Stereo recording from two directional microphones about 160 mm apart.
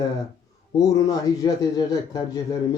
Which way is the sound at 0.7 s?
20° left (ahead or behind).